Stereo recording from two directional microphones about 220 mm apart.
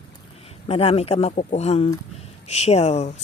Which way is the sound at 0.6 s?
30° left (ahead or behind).